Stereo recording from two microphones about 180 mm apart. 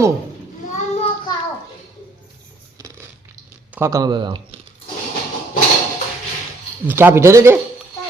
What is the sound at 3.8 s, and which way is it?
Speech, 20° right (ahead or behind).